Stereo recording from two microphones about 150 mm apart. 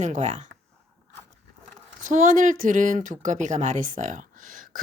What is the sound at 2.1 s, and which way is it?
Speech, 60° right (ahead or behind).